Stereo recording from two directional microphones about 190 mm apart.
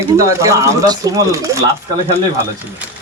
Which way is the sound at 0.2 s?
15° right (ahead or behind).